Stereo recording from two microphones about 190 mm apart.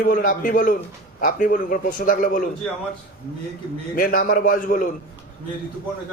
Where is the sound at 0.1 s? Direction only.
45° left (ahead or behind).